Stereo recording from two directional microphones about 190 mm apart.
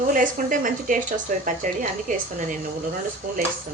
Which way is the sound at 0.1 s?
45° right (ahead or behind).